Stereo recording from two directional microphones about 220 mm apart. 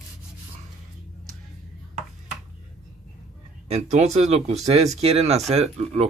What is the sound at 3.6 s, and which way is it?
Speech, 30° right (ahead or behind).